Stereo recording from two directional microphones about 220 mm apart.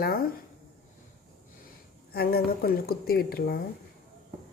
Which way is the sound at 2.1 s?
45° left (ahead or behind).